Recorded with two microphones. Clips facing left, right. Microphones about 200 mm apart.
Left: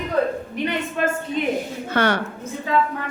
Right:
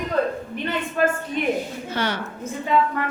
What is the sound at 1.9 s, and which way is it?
Speech, 60° left (ahead or behind).